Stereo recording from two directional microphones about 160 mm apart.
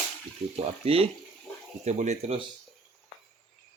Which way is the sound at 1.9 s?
45° right (ahead or behind).